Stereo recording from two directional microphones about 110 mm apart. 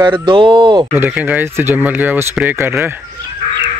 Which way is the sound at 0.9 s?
15° right (ahead or behind).